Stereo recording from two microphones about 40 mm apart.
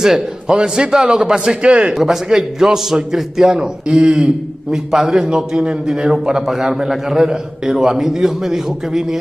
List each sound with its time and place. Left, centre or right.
0.0 s a man's voice: centre
2.0 s a man's voice: centre
5.2 s a man's voice: centre